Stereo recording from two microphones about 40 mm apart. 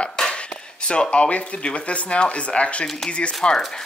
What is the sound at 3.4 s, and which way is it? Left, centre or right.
Speech, centre.